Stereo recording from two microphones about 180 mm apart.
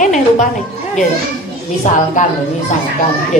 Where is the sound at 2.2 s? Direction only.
45° left (ahead or behind).